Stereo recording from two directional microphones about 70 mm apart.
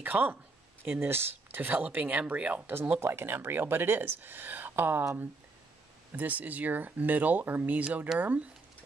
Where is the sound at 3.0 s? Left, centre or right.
Right.